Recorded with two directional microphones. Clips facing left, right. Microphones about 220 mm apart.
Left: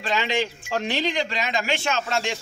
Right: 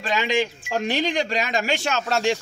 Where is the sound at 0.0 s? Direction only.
45° right (ahead or behind).